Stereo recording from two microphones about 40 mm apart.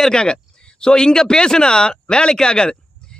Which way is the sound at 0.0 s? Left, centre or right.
Centre.